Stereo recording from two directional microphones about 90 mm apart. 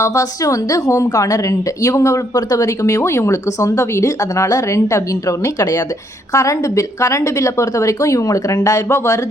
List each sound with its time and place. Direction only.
0.0 s a woman's voice: 35° left (ahead or behind)
6.3 s a woman's voice: 35° left (ahead or behind)